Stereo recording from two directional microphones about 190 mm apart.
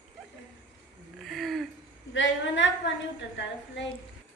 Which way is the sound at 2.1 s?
75° left (ahead or behind).